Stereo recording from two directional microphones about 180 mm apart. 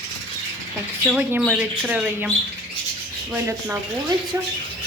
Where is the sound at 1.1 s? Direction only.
5° right (ahead or behind).